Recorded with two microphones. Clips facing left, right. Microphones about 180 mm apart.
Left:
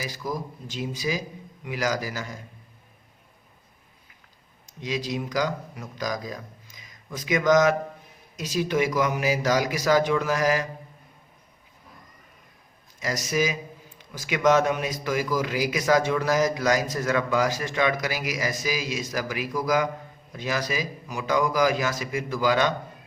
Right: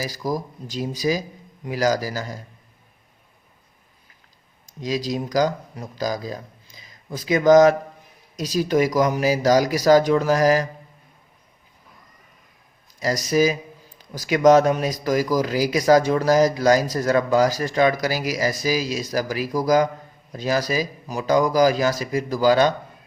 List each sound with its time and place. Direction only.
0.0 s a man's voice: 40° right (ahead or behind)
4.8 s a man's voice: 35° right (ahead or behind)
13.0 s a man's voice: 35° right (ahead or behind)